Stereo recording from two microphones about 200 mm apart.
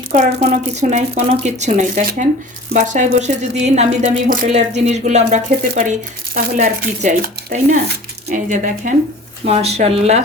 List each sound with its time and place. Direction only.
0.1 s speech: 40° right (ahead or behind)